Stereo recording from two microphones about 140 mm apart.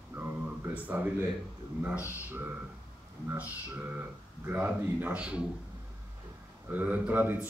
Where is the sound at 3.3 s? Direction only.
10° right (ahead or behind).